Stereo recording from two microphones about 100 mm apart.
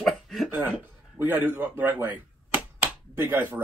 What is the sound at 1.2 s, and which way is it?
Speech, 20° right (ahead or behind).